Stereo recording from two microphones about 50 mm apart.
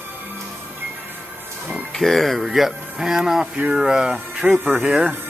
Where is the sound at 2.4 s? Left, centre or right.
Centre.